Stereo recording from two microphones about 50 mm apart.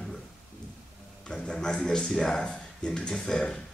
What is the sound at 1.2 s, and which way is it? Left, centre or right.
Speech, centre.